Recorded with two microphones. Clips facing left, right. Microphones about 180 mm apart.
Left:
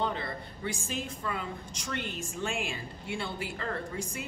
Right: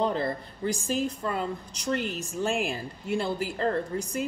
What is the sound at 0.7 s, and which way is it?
A woman's voice, 40° right (ahead or behind).